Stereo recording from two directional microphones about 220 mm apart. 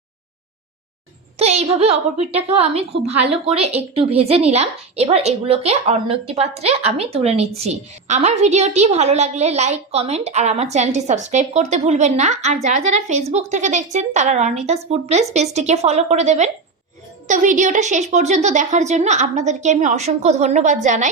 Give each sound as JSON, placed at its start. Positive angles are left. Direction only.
{"t": 1.4, "sound": "a woman's voice", "side_deg": -30}